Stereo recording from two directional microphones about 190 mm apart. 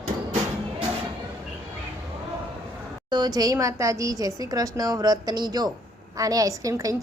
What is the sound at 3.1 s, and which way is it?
A woman's voice, 20° right (ahead or behind).